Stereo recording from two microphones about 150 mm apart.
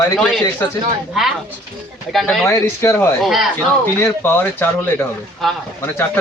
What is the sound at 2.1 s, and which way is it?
Speech, centre (ahead or behind).